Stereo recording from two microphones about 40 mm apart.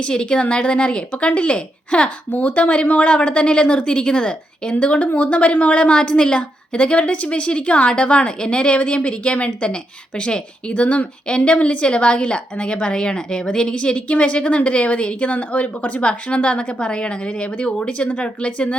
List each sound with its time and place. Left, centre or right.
0.0 s a woman's voice: left
2.3 s speech: left
3.1 s a woman's voice: left